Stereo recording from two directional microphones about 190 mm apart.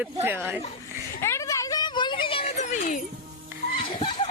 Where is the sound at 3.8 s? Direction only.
25° left (ahead or behind).